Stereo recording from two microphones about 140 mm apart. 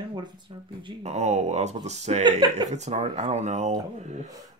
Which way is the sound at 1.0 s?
55° right (ahead or behind).